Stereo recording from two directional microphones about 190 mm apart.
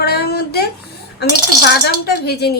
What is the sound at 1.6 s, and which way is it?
Speech, 60° left (ahead or behind).